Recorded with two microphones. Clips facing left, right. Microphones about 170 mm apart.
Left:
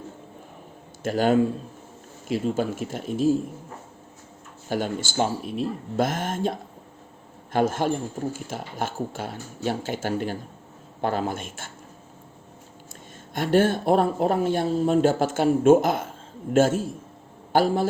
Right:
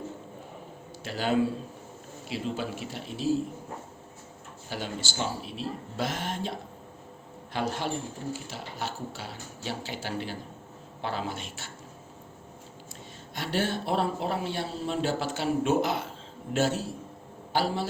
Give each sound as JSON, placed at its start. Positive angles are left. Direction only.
{"t": 1.0, "sound": "speech", "side_deg": 50}
{"t": 4.7, "sound": "speech", "side_deg": 50}
{"t": 13.3, "sound": "speech", "side_deg": 50}